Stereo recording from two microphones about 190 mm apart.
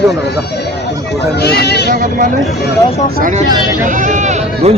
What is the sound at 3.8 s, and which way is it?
Sheep, 40° right (ahead or behind).